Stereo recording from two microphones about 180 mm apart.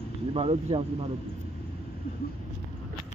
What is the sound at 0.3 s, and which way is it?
Speech, 30° right (ahead or behind).